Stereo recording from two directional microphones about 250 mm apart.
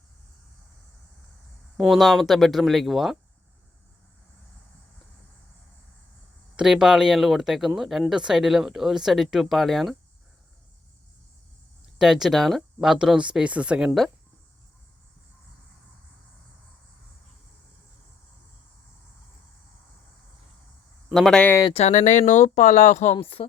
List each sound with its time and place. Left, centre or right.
1.8 s speech: centre
6.6 s speech: centre
11.9 s speech: centre
21.1 s speech: centre
21.7 s speech: left